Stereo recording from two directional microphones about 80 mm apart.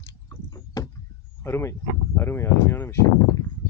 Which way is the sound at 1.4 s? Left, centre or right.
Left.